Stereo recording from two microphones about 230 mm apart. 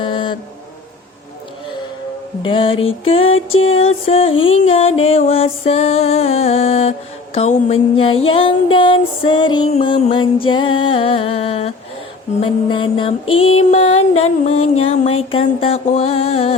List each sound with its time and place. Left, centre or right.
0.0 s a sound: left
2.4 s music: left
3.2 s music: left
3.8 s music: left